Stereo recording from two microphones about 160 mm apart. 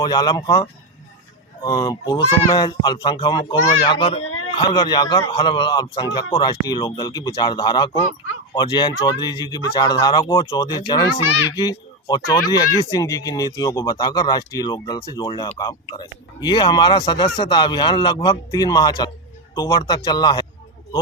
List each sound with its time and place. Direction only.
0.0 s speech: 25° left (ahead or behind)